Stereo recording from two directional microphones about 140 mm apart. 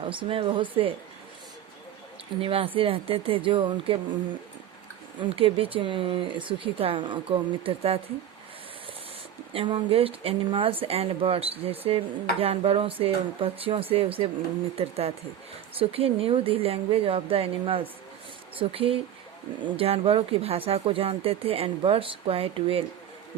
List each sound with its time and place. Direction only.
0.0 s speech: 40° right (ahead or behind)
2.4 s speech: 40° right (ahead or behind)
5.2 s speech: 40° right (ahead or behind)
9.5 s speech: 40° right (ahead or behind)